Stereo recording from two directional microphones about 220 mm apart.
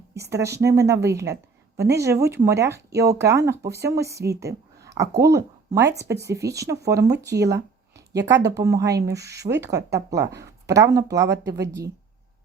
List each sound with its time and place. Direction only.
0.2 s speech: 15° right (ahead or behind)
7.3 s a sound: 15° right (ahead or behind)
8.5 s speech: 15° right (ahead or behind)